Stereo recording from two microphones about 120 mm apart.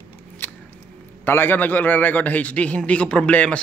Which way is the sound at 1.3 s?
15° left (ahead or behind).